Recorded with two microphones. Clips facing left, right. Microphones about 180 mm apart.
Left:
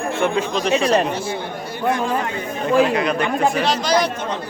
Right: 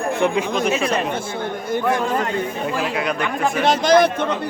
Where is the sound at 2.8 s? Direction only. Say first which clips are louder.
Left 3 dB; centre (ahead or behind).